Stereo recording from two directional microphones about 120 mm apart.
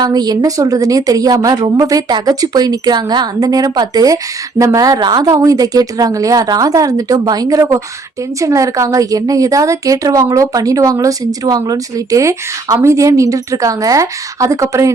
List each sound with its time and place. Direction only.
0.0 s a woman's voice: 35° right (ahead or behind)